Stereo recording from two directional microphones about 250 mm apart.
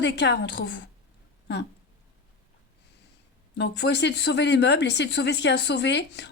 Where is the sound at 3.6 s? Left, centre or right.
Left.